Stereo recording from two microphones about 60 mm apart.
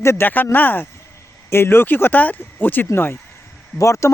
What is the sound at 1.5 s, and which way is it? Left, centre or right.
Speech, left.